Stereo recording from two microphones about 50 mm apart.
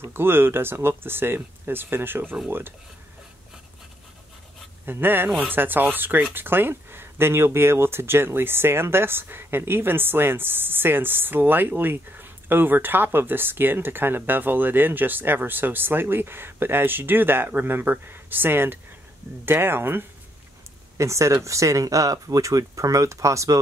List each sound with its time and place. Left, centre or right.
0.0 s speech: right
5.0 s speech: right
21.0 s speech: right